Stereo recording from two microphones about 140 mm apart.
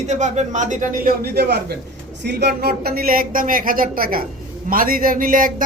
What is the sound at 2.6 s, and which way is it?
A man's voice, 90° right.